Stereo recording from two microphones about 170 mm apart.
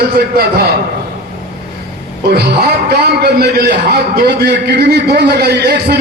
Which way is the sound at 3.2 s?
70° right (ahead or behind).